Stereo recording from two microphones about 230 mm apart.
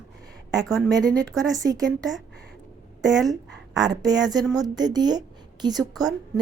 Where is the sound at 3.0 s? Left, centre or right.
Centre.